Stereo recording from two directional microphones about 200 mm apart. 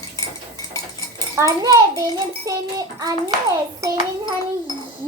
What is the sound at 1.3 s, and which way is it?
A child's voice, 15° right (ahead or behind).